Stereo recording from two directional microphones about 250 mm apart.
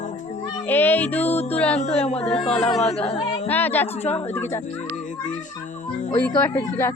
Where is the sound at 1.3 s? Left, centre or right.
Left.